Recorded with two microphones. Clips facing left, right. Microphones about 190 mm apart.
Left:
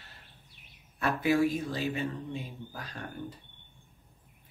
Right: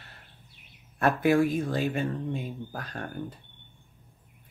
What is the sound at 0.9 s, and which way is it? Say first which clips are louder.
Speech: right 4 dB; 55° right (ahead or behind).